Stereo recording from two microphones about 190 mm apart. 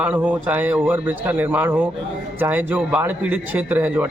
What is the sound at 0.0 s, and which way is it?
A man's voice, 10° right (ahead or behind).